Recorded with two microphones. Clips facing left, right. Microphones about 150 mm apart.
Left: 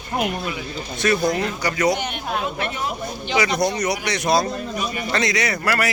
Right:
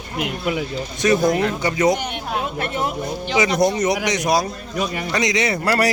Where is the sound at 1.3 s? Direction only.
25° right (ahead or behind).